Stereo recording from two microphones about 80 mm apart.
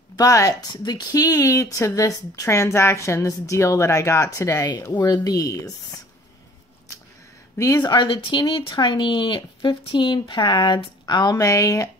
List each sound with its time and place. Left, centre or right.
0.1 s speech: left
4.9 s speech: left
7.5 s speech: left
7.8 s speech: left